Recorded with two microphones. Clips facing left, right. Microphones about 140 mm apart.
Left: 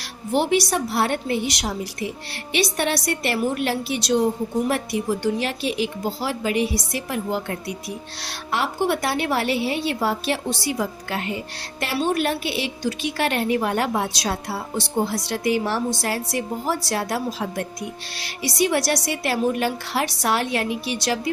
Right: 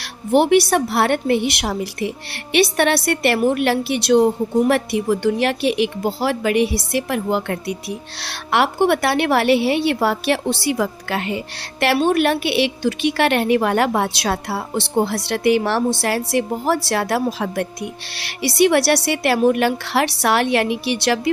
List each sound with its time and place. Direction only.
0.3 s a woman's voice: 60° right (ahead or behind); by 11.3 s 85° right
11.8 s a woman's voice: 70° right (ahead or behind)